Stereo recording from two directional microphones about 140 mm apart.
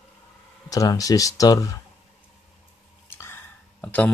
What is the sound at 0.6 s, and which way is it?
Speech, 25° left (ahead or behind).